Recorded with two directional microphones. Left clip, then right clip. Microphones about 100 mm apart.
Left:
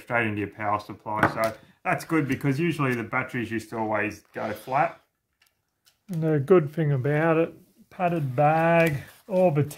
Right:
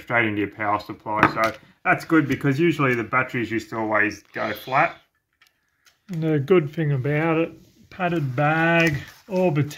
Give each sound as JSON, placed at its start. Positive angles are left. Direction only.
{"t": 0.1, "sound": "speech", "side_deg": 10}
{"t": 1.1, "sound": "speech", "side_deg": 25}
{"t": 1.9, "sound": "speech", "side_deg": 45}
{"t": 2.3, "sound": "speech", "side_deg": 25}
{"t": 3.3, "sound": "speech", "side_deg": 5}
{"t": 6.0, "sound": "speech", "side_deg": 10}
{"t": 6.4, "sound": "speech", "side_deg": 25}
{"t": 8.0, "sound": "speech", "side_deg": 0}